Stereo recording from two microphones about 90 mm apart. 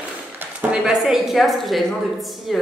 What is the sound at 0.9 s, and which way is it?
A woman's voice, centre (ahead or behind).